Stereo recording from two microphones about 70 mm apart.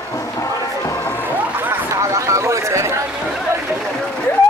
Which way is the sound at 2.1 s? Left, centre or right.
Right.